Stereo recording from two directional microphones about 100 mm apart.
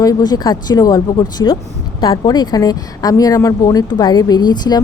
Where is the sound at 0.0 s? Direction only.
40° left (ahead or behind).